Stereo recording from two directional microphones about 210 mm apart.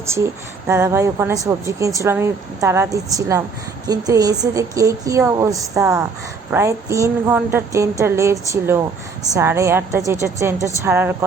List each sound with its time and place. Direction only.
0.7 s speech: 15° right (ahead or behind)